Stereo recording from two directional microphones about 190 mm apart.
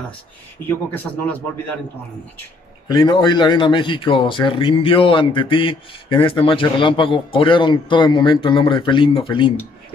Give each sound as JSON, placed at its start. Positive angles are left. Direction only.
{"t": 0.7, "sound": "a man's voice", "side_deg": 10}
{"t": 2.9, "sound": "speech", "side_deg": 20}